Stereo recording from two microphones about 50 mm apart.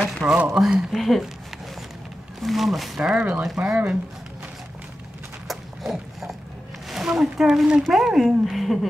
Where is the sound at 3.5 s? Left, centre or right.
Centre.